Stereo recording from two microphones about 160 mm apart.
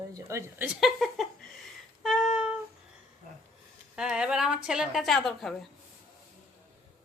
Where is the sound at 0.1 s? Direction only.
20° right (ahead or behind).